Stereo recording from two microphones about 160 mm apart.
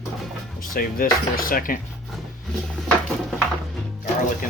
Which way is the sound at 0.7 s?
65° left (ahead or behind).